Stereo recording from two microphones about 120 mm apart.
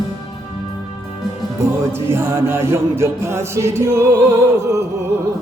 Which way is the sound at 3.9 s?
20° right (ahead or behind).